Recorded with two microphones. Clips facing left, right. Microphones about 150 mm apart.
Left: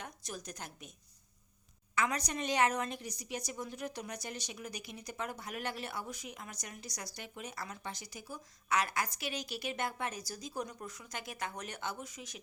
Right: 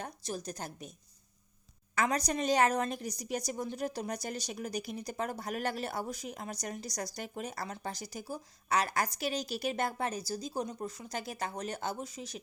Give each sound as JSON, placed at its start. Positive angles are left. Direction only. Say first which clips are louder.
{"t": 0.0, "sound": "a woman's voice", "louder": "right 6 dB", "side_deg": -35}
{"t": 2.0, "sound": "a woman's voice", "louder": "right 4 dB", "side_deg": -35}